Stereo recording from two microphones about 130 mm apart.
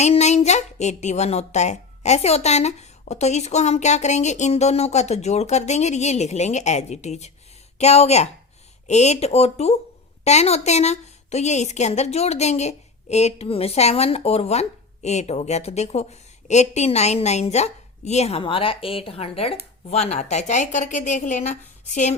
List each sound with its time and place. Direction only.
0.0 s a woman's voice: 60° left (ahead or behind)